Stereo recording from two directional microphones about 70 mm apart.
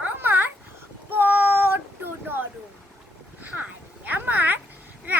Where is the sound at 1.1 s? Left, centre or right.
Right.